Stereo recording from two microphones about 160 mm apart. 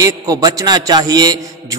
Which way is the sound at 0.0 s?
20° right (ahead or behind).